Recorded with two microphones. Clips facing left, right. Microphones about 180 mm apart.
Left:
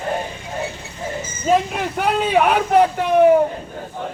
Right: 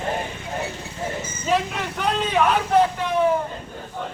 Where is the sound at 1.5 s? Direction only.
55° left (ahead or behind).